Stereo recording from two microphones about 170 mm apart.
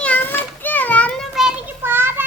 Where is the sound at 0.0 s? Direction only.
10° left (ahead or behind).